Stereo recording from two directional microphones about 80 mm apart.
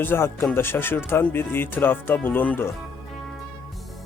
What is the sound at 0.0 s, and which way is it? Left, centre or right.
Speech, left.